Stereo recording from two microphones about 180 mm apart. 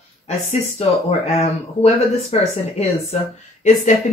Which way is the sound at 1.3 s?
35° left (ahead or behind).